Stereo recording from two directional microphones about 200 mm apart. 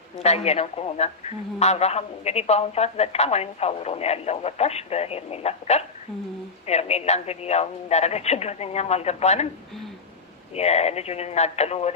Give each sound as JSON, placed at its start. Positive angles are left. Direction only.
{"t": 0.2, "sound": "a woman's voice", "side_deg": 30}
{"t": 10.5, "sound": "a woman's voice", "side_deg": 30}